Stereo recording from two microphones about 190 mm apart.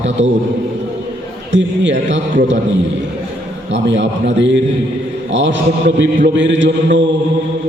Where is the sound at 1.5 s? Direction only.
75° right (ahead or behind).